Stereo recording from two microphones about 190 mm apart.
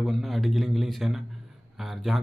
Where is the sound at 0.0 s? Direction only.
Centre (ahead or behind).